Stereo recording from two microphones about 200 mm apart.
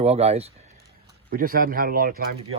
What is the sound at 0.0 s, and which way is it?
Speech, 30° right (ahead or behind).